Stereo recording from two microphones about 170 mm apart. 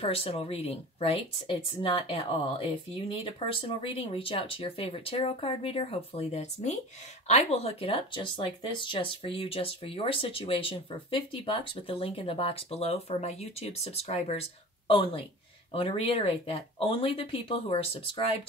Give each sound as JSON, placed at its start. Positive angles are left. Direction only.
{"t": 0.0, "sound": "speech", "side_deg": 35}